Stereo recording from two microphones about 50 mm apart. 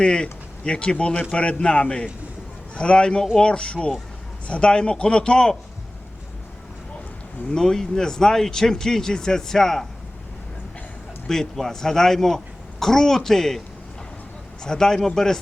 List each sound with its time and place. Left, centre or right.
0.0 s speech: centre
7.5 s speech: centre
11.3 s speech: centre
14.6 s speech: centre